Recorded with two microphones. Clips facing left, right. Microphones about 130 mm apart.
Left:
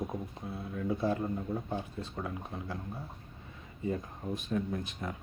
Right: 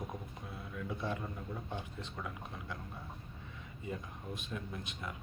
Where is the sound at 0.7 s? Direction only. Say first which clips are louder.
Left 8 dB; 35° left (ahead or behind).